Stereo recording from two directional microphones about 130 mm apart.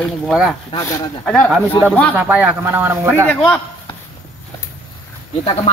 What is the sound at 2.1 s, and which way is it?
Speech, 15° right (ahead or behind).